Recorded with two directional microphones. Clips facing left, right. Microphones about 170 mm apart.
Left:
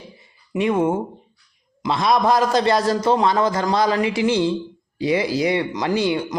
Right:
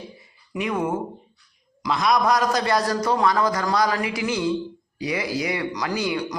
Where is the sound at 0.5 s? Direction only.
25° left (ahead or behind).